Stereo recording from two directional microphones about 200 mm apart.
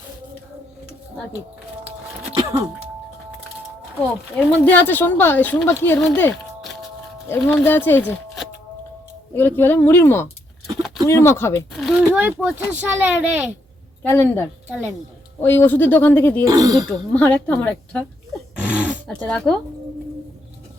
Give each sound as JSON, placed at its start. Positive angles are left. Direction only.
{"t": 2.3, "sound": "music", "side_deg": -20}
{"t": 4.4, "sound": "speech", "side_deg": 5}
{"t": 9.3, "sound": "speech", "side_deg": 10}
{"t": 11.7, "sound": "speech", "side_deg": 0}
{"t": 14.0, "sound": "speech", "side_deg": 10}
{"t": 14.7, "sound": "speech", "side_deg": -10}
{"t": 15.4, "sound": "speech", "side_deg": 10}
{"t": 16.4, "sound": "speech", "side_deg": -20}
{"t": 16.9, "sound": "speech", "side_deg": 5}
{"t": 18.5, "sound": "a sound", "side_deg": -5}
{"t": 19.3, "sound": "speech", "side_deg": 0}